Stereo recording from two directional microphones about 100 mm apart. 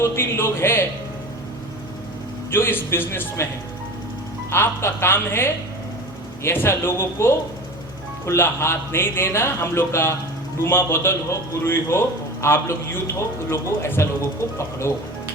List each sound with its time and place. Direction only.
0.0 s a man's voice: 25° left (ahead or behind)
2.5 s a man's voice: 20° left (ahead or behind)
4.5 s a man's voice: 25° left (ahead or behind)